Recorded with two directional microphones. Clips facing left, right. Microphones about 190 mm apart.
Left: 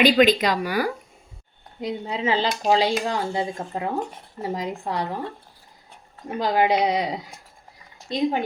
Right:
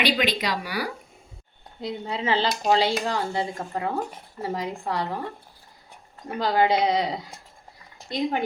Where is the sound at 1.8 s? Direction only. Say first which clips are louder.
Left 3 dB; 15° left (ahead or behind).